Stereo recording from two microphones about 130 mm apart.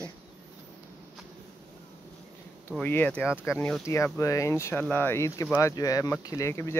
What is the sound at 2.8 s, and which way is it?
Speech, 10° left (ahead or behind).